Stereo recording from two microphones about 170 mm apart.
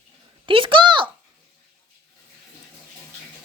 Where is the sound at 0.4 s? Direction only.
30° right (ahead or behind).